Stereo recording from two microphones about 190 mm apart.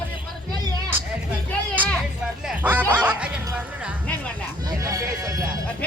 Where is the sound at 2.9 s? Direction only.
5° right (ahead or behind).